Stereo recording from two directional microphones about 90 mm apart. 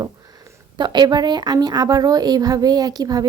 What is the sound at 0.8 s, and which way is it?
A woman's voice, 55° right (ahead or behind).